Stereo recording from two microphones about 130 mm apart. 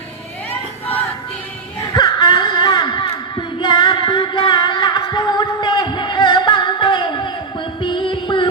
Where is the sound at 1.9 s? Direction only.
35° left (ahead or behind).